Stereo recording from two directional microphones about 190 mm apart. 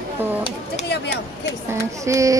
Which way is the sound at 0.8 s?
60° left (ahead or behind).